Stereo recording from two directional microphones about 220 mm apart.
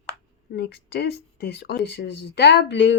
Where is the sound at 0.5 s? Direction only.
50° left (ahead or behind).